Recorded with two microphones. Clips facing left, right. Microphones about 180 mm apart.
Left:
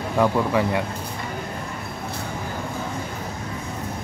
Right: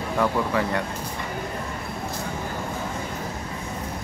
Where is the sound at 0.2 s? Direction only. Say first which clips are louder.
Left 4 dB; 15° left (ahead or behind).